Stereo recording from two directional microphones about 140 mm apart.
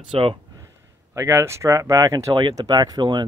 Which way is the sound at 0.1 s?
40° right (ahead or behind).